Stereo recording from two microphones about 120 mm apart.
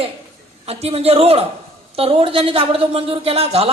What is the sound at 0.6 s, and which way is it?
Speech, 60° right (ahead or behind).